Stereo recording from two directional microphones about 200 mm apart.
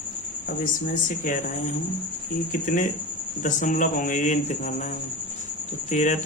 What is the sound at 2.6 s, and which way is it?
Speech, 40° left (ahead or behind).